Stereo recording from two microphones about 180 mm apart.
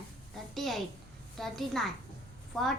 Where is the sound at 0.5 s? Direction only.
Centre (ahead or behind).